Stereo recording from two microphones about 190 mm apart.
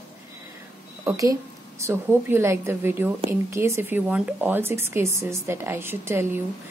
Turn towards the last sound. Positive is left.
turn(degrees=-10)  # may be behind; listen again after turning